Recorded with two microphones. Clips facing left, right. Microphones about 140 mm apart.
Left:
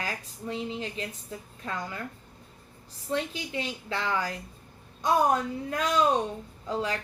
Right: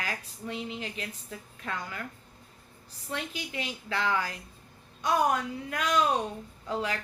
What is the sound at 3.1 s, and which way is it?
A woman's voice, 35° left (ahead or behind).